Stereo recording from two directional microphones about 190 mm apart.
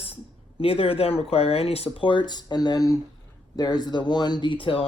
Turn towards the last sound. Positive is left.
turn(degrees=25)  # may be behind; listen again after turning